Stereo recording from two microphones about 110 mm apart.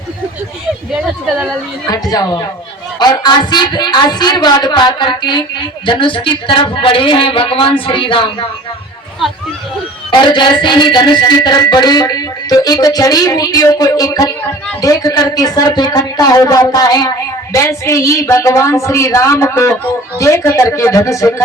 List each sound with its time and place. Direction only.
0.9 s a woman's voice: 5° right (ahead or behind)
1.9 s music: 35° left (ahead or behind)
3.0 s speech: 40° left (ahead or behind)
10.1 s music: 45° left (ahead or behind)
14.8 s speech: 30° left (ahead or behind)